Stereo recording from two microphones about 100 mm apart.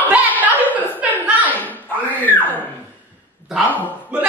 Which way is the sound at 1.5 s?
15° left (ahead or behind).